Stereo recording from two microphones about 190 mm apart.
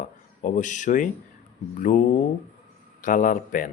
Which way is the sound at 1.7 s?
45° left (ahead or behind).